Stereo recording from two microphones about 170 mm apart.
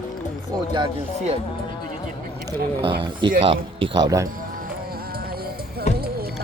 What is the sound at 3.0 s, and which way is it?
Speech, 30° right (ahead or behind).